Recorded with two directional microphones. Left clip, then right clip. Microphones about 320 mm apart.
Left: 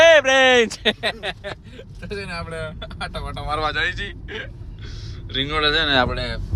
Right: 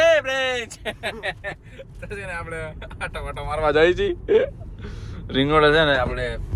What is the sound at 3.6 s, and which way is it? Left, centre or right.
Speech, centre.